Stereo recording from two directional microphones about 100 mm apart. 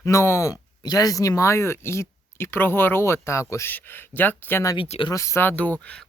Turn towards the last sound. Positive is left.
turn(degrees=15)  # may be behind; listen again after turning